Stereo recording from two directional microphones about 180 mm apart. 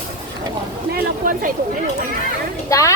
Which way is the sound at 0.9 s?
50° right (ahead or behind).